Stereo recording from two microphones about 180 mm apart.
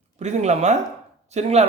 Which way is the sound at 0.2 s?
40° right (ahead or behind).